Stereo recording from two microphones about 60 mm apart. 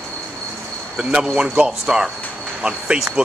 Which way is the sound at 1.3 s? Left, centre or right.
Centre.